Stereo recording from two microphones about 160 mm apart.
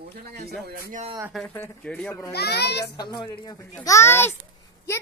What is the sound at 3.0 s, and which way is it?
Speech, 25° left (ahead or behind).